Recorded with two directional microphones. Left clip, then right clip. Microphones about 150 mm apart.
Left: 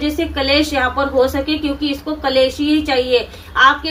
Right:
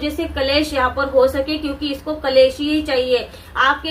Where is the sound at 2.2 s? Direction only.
40° left (ahead or behind).